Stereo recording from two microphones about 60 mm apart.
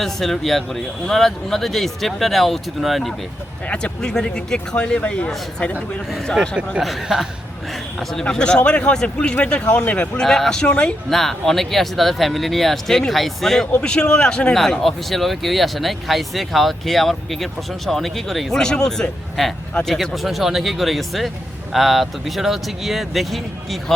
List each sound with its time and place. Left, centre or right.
0.0 s speech: centre
3.7 s speech: left
6.8 s speech: centre
7.9 s speech: centre
10.2 s speech: centre